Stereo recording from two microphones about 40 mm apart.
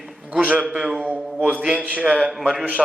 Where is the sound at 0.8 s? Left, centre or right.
Centre.